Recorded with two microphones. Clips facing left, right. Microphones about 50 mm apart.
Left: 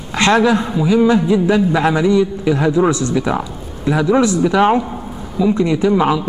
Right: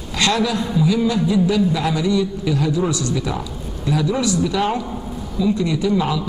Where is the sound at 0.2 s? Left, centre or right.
Left.